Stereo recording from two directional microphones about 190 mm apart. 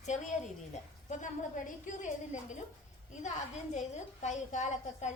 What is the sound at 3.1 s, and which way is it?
A woman's voice, 40° left (ahead or behind).